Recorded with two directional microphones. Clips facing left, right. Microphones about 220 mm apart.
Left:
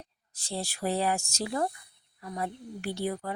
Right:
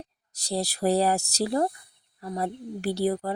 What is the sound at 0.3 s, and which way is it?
A woman's voice, 40° right (ahead or behind).